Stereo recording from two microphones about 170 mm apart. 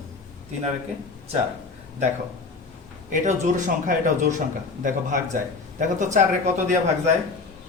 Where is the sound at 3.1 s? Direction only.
50° right (ahead or behind).